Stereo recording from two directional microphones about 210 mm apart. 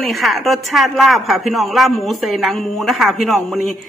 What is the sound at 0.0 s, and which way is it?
Speech, centre (ahead or behind).